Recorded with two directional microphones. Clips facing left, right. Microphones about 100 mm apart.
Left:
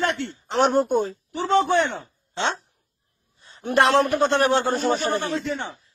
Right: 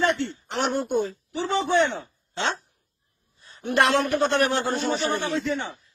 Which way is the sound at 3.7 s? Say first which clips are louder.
Left 3 dB; 35° left (ahead or behind).